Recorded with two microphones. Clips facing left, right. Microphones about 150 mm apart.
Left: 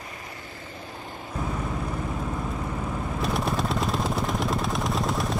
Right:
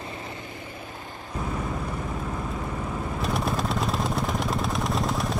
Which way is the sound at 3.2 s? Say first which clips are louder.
Left 1 dB; centre (ahead or behind).